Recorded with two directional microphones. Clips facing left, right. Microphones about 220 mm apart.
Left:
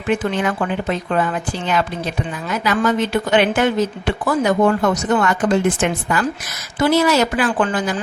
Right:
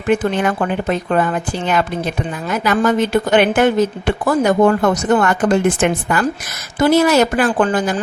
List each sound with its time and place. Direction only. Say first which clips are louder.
0.1 s a woman's voice: right 3 dB; 45° right (ahead or behind)